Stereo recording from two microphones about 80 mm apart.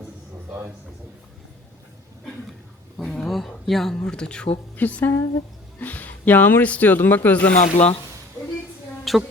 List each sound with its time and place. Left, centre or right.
3.0 s a sound: centre
3.9 s speech: centre
9.1 s speech: centre